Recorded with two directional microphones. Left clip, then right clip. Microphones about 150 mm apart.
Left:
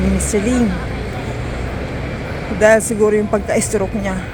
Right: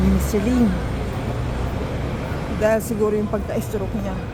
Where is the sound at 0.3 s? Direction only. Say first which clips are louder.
Left 5 dB; 5° right (ahead or behind).